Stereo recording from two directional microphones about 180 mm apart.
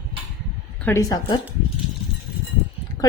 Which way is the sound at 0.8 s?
15° left (ahead or behind).